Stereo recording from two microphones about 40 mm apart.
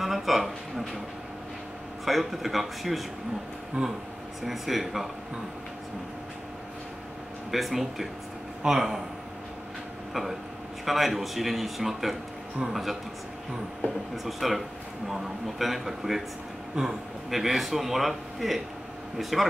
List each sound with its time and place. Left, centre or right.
0.0 s speech: centre
2.0 s a man's voice: centre
3.8 s speech: right
4.4 s a man's voice: centre
7.5 s a man's voice: centre
10.9 s a man's voice: centre
14.1 s a man's voice: centre
17.3 s a man's voice: centre